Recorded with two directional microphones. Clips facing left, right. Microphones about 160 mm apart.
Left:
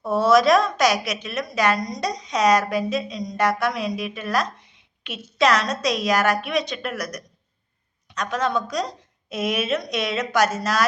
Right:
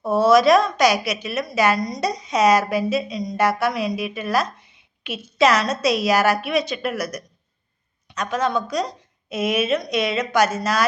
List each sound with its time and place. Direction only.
0.0 s a woman's voice: centre (ahead or behind)